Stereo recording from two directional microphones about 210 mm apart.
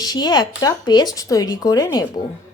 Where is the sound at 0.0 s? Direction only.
20° left (ahead or behind).